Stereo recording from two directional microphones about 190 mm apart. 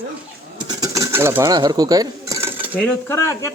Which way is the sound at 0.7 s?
20° right (ahead or behind).